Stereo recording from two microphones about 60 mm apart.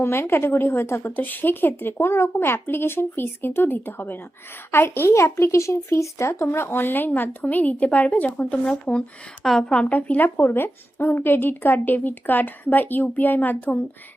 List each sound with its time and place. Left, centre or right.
0.0 s a woman's voice: left; by 9.8 s centre
9.9 s speech: left